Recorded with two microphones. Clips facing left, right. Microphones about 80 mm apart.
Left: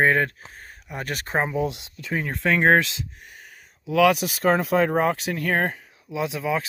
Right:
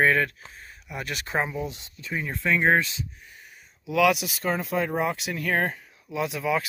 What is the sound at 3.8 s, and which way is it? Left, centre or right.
Speech, left.